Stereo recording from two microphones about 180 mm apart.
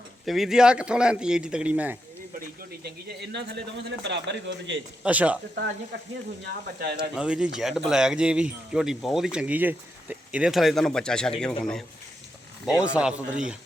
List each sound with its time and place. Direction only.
0.3 s speech: centre (ahead or behind)
2.6 s speech: 65° right (ahead or behind); by 4.8 s 90° right
5.0 s speech: 5° right (ahead or behind)
6.4 s speech: 60° right (ahead or behind)
7.1 s speech: 5° right (ahead or behind)